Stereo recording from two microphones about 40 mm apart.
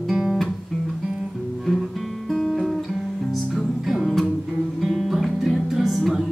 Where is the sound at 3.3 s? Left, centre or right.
Centre.